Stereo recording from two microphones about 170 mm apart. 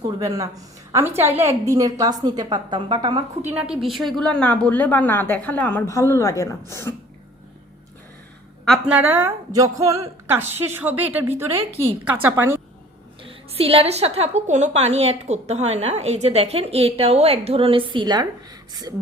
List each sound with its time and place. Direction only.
0.0 s a woman's voice: 20° right (ahead or behind)
3.5 s a woman's voice: 5° right (ahead or behind); by 6.9 s 15° left (ahead or behind)
8.9 s a woman's voice: 10° right (ahead or behind)
13.2 s a woman's voice: 35° right (ahead or behind)